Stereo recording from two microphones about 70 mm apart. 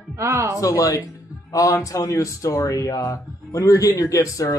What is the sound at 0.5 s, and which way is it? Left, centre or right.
A man's voice, left.